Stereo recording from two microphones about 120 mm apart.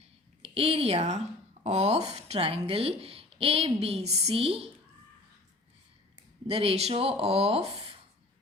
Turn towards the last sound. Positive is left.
turn(degrees=-60)  # may be behind; listen again after turning